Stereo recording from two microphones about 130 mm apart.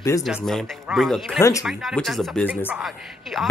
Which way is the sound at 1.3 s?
25° left (ahead or behind).